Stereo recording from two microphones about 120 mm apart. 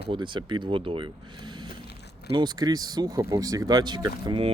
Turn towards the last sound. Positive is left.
turn(degrees=-45)  # may be behind; listen again after turning